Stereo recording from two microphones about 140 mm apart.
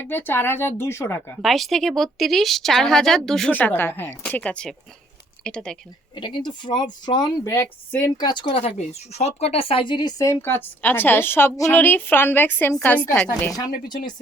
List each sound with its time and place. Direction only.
0.1 s speech: 15° left (ahead or behind)
1.4 s speech: centre (ahead or behind)
6.1 s speech: 35° left (ahead or behind)
8.2 s speech: 35° left (ahead or behind); by 13.6 s 5° left (ahead or behind)